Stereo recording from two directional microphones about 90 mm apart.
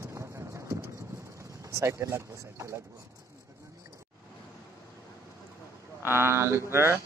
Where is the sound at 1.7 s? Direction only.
30° right (ahead or behind).